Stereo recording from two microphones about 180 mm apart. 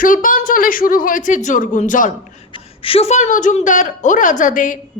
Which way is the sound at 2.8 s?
35° left (ahead or behind).